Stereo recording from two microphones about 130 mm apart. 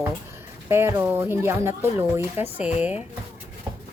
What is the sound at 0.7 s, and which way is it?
Speech, 20° right (ahead or behind).